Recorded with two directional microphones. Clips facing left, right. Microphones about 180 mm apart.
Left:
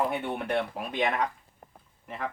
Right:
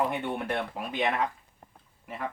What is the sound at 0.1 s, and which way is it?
Speech, centre (ahead or behind).